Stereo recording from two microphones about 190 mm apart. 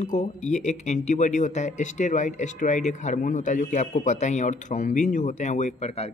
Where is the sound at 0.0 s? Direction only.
40° left (ahead or behind).